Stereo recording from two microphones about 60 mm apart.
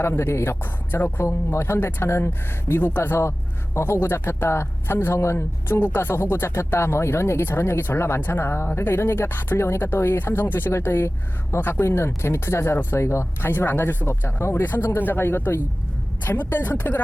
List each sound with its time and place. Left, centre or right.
0.0 s speech: left
0.6 s speech: left
1.5 s speech: left
5.6 s speech: left
8.2 s speech: left
14.5 s speech: left